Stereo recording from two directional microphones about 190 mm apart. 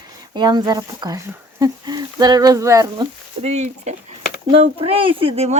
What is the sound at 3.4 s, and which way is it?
Speech, 35° right (ahead or behind).